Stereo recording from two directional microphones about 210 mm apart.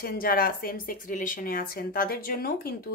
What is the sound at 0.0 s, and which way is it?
Speech, 45° left (ahead or behind).